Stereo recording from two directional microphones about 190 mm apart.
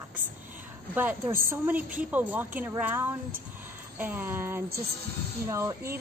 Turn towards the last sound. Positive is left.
turn(degrees=-15)  # may be behind; listen again after turning